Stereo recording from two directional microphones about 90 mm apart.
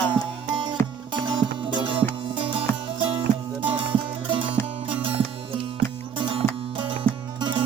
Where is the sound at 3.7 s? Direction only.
75° right (ahead or behind).